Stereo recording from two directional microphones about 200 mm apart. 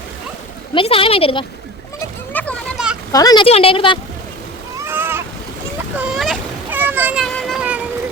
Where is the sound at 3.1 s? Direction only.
20° left (ahead or behind).